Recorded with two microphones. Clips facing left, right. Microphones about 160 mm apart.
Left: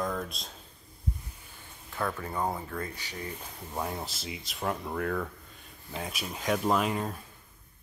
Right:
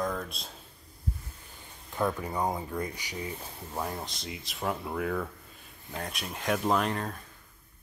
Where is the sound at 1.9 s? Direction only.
15° right (ahead or behind).